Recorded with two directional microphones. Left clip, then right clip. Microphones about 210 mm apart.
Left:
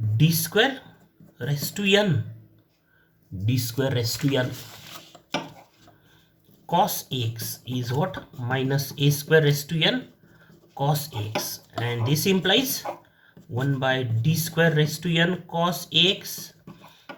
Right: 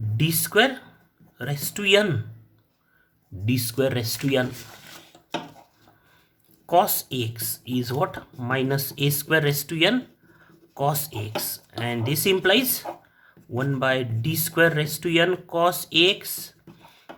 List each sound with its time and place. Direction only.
0.2 s speech: 40° right (ahead or behind)
3.4 s speech: 40° right (ahead or behind)
6.7 s speech: 45° right (ahead or behind)